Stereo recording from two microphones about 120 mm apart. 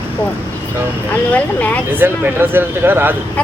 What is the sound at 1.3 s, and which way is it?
Speech, 10° left (ahead or behind).